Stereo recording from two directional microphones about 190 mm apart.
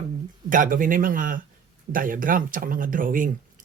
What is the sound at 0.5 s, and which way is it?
Speech, 45° right (ahead or behind).